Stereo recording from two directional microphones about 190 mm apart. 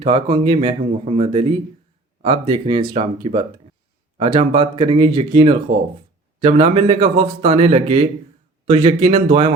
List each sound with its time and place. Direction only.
0.0 s a man's voice: 30° right (ahead or behind)